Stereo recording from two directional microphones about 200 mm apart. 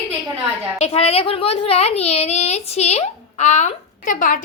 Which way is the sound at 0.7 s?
30° left (ahead or behind).